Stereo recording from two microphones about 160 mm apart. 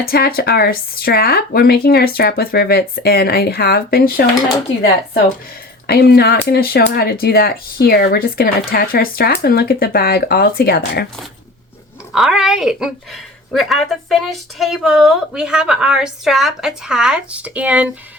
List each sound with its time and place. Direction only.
0.0 s speech: 70° left (ahead or behind)
5.9 s speech: 80° left
12.1 s a woman's voice: 5° right (ahead or behind)